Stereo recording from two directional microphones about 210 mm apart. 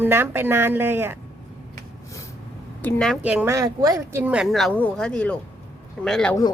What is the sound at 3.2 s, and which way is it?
A woman's voice, 5° right (ahead or behind).